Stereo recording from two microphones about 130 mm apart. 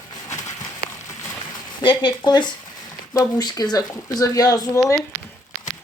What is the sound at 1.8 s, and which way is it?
Speech, 40° left (ahead or behind).